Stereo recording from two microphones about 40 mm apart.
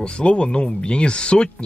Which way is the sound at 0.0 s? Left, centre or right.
Left.